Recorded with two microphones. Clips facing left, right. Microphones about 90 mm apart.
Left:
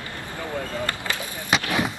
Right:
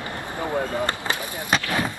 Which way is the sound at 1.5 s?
15° left (ahead or behind).